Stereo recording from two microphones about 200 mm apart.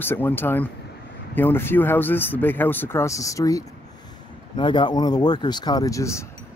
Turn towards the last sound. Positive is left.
turn(degrees=15)  # may be behind; listen again after turning